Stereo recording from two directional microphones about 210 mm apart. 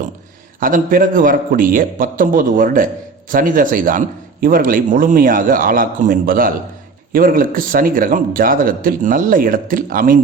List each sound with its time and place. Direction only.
0.6 s speech: 40° right (ahead or behind)